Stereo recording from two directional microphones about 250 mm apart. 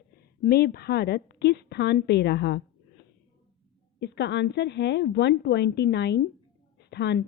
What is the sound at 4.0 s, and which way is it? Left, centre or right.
A woman's voice, left.